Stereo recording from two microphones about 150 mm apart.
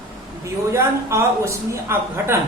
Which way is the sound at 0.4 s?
20° right (ahead or behind).